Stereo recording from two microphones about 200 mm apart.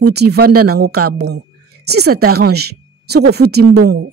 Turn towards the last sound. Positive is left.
turn(degrees=-55)  # may be behind; listen again after turning